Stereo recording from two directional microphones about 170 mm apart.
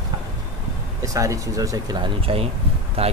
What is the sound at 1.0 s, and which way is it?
Speech, 20° right (ahead or behind).